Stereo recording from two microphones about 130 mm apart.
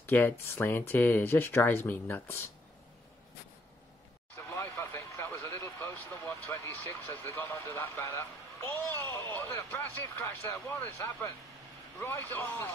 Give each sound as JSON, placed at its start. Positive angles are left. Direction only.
{"t": 0.0, "sound": "speech", "side_deg": 15}
{"t": 4.5, "sound": "vehicle", "side_deg": 20}
{"t": 7.2, "sound": "a man's voice", "side_deg": 20}